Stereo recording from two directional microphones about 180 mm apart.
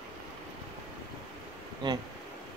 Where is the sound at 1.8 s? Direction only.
25° right (ahead or behind).